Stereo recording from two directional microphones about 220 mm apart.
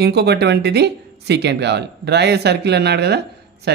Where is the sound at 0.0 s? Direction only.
50° right (ahead or behind).